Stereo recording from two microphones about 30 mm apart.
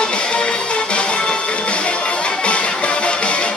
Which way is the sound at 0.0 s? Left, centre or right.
Left.